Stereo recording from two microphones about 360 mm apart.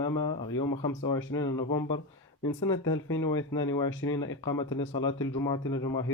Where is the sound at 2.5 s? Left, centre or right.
Left.